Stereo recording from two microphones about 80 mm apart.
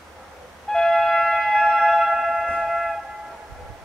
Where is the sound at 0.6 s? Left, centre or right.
Centre.